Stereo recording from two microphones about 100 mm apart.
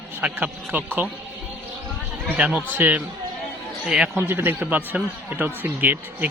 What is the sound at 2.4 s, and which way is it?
A man's voice, 15° right (ahead or behind).